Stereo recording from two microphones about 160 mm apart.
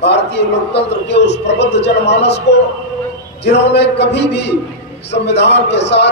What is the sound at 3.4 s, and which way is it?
A man's voice, 90° left.